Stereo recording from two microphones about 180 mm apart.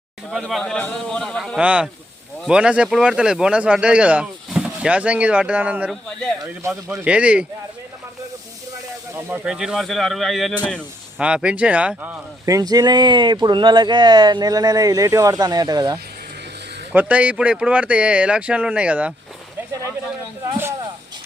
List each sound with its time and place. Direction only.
0.3 s a man's voice: centre (ahead or behind)
9.1 s a man's voice: 10° right (ahead or behind)
12.5 s speech: 20° right (ahead or behind)
16.9 s speech: 10° right (ahead or behind)
20.4 s a sound: 15° right (ahead or behind)